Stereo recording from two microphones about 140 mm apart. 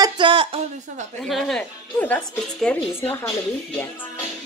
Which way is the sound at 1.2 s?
5° left (ahead or behind).